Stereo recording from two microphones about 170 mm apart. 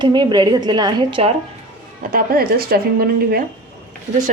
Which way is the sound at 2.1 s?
60° right (ahead or behind).